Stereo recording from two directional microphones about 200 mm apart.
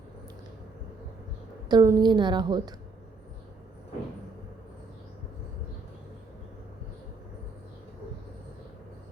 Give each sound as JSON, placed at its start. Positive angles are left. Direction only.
{"t": 1.7, "sound": "a woman's voice", "side_deg": -20}